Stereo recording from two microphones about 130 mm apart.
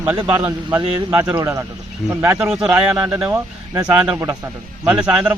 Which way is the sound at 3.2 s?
25° right (ahead or behind).